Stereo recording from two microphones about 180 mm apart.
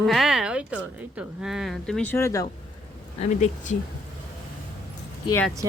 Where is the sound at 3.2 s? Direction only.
40° left (ahead or behind).